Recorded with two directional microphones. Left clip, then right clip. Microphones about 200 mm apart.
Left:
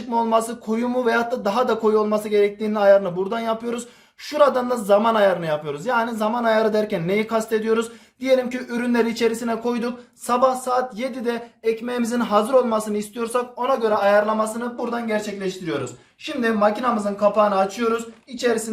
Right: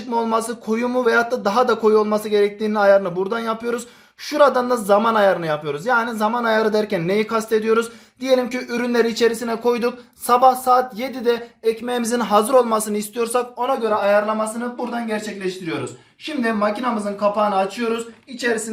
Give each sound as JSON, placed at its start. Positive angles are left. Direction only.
{"t": 0.1, "sound": "speech", "side_deg": -40}
{"t": 13.8, "sound": "speech", "side_deg": 5}